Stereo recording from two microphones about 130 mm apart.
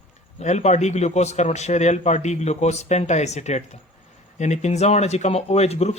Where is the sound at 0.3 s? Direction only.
60° left (ahead or behind).